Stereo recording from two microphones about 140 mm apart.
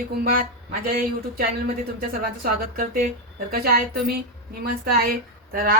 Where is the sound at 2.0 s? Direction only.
90° right.